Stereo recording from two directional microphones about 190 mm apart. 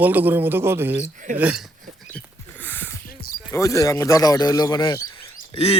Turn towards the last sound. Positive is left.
turn(degrees=30)  # may be behind; listen again after turning